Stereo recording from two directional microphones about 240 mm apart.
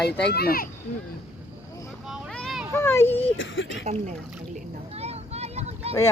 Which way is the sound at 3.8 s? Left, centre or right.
Right.